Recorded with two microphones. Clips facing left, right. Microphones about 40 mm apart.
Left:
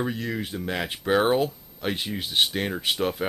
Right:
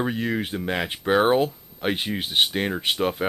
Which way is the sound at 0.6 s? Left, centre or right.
Centre.